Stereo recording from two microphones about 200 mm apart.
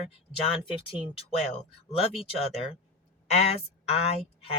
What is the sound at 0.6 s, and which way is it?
Speech, 25° left (ahead or behind).